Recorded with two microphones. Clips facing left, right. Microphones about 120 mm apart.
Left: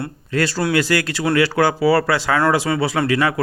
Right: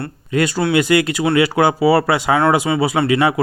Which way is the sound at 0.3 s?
15° right (ahead or behind).